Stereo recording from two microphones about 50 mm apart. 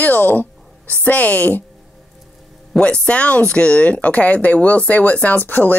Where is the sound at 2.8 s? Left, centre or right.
Left.